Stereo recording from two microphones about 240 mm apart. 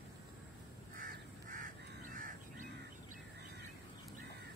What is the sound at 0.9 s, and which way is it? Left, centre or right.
Crow, right.